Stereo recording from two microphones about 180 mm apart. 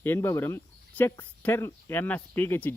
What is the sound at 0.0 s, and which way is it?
Speech, 15° left (ahead or behind).